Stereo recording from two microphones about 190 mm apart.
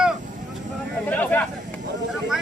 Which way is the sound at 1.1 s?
10° left (ahead or behind).